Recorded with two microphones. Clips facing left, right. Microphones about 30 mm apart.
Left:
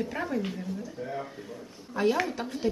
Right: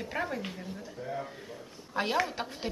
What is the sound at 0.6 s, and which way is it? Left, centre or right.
Speech, right.